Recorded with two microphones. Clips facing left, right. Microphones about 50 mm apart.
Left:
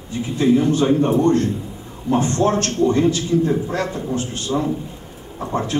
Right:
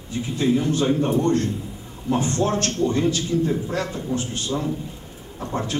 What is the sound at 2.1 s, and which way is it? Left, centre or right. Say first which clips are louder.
A man's voice: left 4 dB; centre.